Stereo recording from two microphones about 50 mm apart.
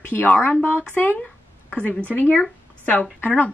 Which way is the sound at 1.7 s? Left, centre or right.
Left.